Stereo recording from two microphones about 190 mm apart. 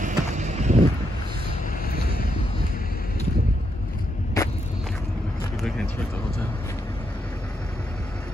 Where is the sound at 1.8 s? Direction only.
55° left (ahead or behind).